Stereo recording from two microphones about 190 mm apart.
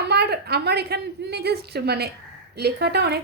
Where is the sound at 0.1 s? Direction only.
60° right (ahead or behind).